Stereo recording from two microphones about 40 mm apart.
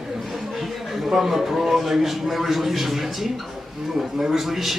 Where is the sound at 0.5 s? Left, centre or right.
Centre.